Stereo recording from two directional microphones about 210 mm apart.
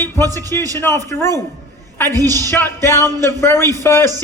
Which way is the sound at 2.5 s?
10° left (ahead or behind).